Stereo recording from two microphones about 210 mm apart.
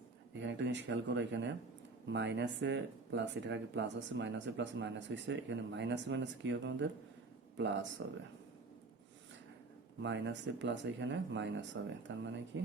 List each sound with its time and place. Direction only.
0.3 s speech: 60° right (ahead or behind)
10.0 s speech: 60° right (ahead or behind)